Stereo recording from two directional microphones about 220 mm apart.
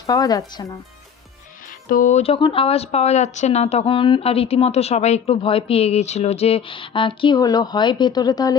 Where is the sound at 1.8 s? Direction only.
35° left (ahead or behind).